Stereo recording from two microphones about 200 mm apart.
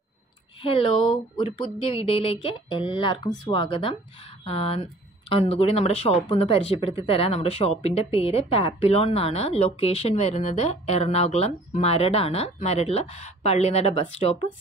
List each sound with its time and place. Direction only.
0.6 s a woman's voice: 25° left (ahead or behind)